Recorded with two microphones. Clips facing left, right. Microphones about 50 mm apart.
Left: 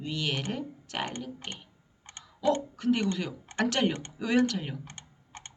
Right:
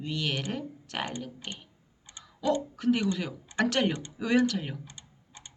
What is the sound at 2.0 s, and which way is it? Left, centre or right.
Dog, left.